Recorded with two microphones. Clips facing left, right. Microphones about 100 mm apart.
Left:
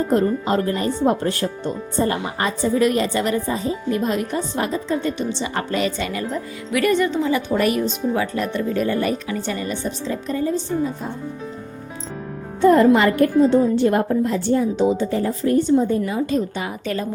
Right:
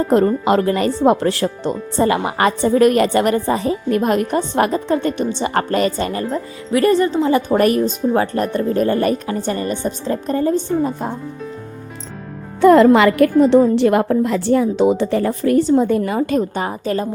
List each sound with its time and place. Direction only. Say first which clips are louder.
0.1 s speech: right 6 dB; 90° right; by 6.1 s 45° right (ahead or behind)
6.1 s speech: right 4 dB; 35° right (ahead or behind); by 11.2 s 55° right (ahead or behind)
12.6 s a woman's voice: right 4 dB; 85° right; by 16.4 s 60° right (ahead or behind)
16.6 s a woman's voice: right 5 dB; 40° right (ahead or behind)